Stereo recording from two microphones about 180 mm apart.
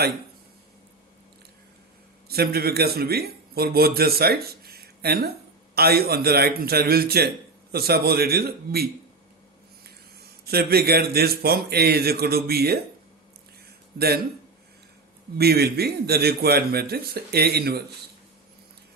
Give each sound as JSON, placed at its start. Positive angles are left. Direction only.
{"t": 2.3, "sound": "a man's voice", "side_deg": -60}
{"t": 15.4, "sound": "a man's voice", "side_deg": -60}